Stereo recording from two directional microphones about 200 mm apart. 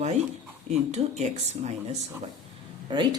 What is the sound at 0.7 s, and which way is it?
Speech, 35° right (ahead or behind).